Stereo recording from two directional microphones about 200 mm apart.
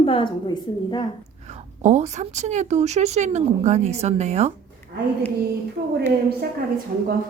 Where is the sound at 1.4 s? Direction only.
35° right (ahead or behind).